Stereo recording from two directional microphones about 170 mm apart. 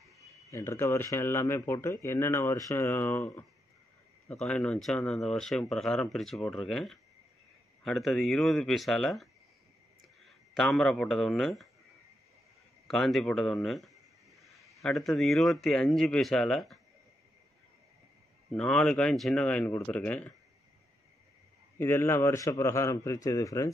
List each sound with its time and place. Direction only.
0.5 s speech: 15° left (ahead or behind); by 11.7 s centre (ahead or behind)
12.8 s a man's voice: centre (ahead or behind)
18.5 s speech: 5° left (ahead or behind)
21.7 s speech: 15° left (ahead or behind)